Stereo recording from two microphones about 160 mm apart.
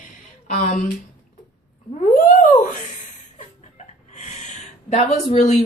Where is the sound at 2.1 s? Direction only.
55° left (ahead or behind).